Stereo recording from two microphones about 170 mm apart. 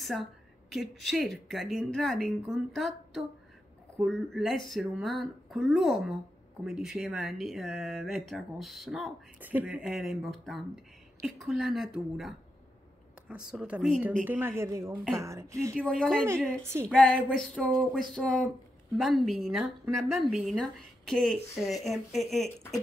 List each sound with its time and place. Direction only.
0.0 s a woman's voice: centre (ahead or behind); by 15.7 s 15° right (ahead or behind)
15.7 s speech: 5° left (ahead or behind)